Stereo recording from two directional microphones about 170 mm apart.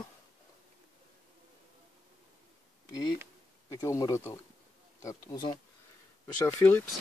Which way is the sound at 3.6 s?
20° left (ahead or behind).